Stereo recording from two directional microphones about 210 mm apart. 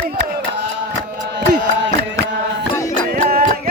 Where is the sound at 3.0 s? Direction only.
40° right (ahead or behind).